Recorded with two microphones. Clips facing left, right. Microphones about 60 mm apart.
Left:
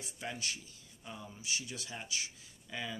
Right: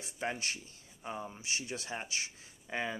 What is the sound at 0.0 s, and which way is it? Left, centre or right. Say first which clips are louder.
Speech: right 4 dB; right.